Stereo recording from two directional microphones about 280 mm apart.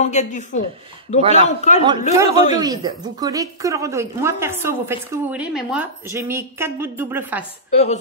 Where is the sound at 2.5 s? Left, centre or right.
Centre.